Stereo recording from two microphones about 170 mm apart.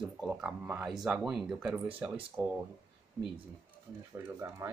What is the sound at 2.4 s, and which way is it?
Speech, 20° right (ahead or behind).